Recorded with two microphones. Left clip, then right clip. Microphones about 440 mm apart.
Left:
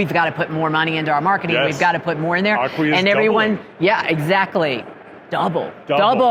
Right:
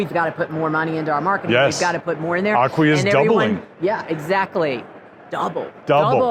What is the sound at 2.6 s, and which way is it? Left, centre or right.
Speech, right.